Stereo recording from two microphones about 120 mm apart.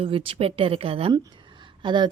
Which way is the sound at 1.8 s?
40° right (ahead or behind).